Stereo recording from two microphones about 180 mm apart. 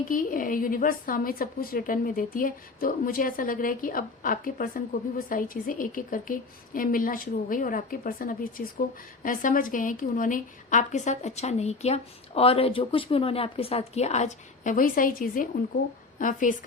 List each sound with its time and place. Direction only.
0.1 s a woman's voice: 50° left (ahead or behind)